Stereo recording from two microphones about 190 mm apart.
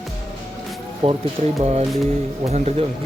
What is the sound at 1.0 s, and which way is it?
Speech, 35° right (ahead or behind).